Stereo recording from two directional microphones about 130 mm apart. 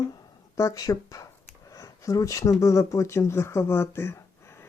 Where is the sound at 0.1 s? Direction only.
25° left (ahead or behind).